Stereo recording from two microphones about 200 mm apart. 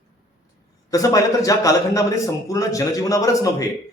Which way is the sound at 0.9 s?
15° left (ahead or behind).